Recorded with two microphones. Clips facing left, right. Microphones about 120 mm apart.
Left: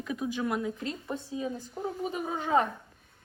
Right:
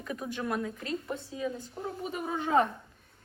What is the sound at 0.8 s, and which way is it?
Speech, 30° left (ahead or behind).